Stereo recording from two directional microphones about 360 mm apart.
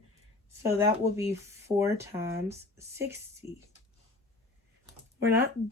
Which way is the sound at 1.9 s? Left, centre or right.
Centre.